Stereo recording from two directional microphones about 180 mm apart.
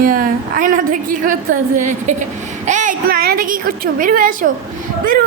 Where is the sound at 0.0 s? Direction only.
50° right (ahead or behind).